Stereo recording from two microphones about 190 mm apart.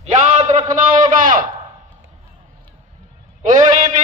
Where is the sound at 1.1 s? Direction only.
45° right (ahead or behind).